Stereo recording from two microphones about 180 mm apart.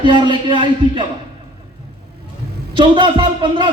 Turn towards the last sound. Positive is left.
turn(degrees=-25)  # may be behind; listen again after turning